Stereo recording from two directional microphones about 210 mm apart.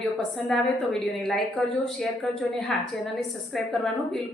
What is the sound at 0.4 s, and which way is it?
Speech, centre (ahead or behind).